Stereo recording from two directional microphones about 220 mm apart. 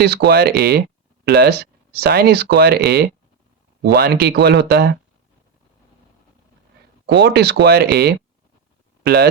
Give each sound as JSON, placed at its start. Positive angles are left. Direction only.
{"t": 0.0, "sound": "speech", "side_deg": -50}
{"t": 7.2, "sound": "speech", "side_deg": -50}